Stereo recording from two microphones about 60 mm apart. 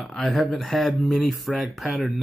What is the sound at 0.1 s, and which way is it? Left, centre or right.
Speech, centre.